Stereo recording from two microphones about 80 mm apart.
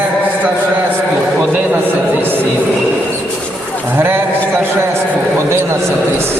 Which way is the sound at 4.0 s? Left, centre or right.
Right.